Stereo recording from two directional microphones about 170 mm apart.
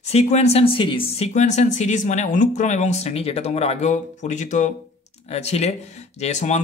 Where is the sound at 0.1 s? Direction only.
40° left (ahead or behind).